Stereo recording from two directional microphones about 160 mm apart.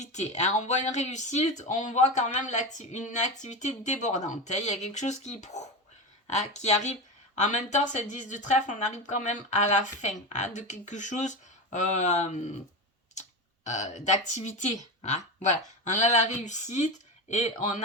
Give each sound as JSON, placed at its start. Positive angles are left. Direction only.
{"t": 0.0, "sound": "speech", "side_deg": 45}
{"t": 13.7, "sound": "speech", "side_deg": 45}